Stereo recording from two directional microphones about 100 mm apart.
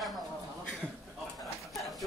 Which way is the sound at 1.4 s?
Centre (ahead or behind).